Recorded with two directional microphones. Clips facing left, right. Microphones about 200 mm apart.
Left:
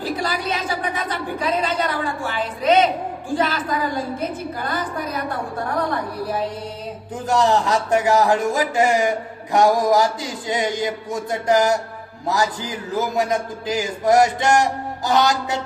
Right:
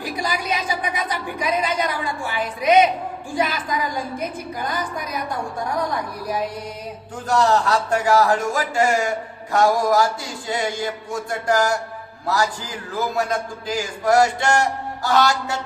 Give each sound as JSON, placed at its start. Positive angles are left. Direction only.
{"t": 0.0, "sound": "a sound", "side_deg": -10}
{"t": 3.3, "sound": "a woman's voice", "side_deg": -15}
{"t": 7.3, "sound": "a man's voice", "side_deg": 20}